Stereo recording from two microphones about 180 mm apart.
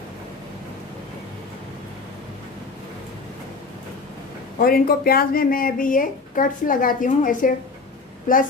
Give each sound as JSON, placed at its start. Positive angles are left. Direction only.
{"t": 4.6, "sound": "speech", "side_deg": 55}